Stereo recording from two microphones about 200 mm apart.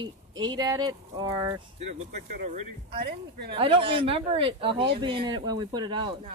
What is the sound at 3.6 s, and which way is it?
Speech, 25° right (ahead or behind).